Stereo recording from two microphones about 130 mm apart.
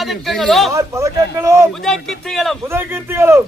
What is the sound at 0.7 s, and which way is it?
Speech, 25° right (ahead or behind).